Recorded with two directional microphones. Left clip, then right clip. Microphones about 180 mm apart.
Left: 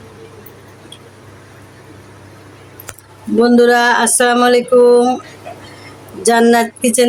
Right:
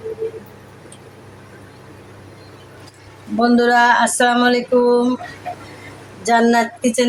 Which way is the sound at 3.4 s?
80° left.